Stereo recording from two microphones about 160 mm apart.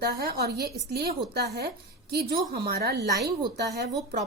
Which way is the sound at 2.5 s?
80° right.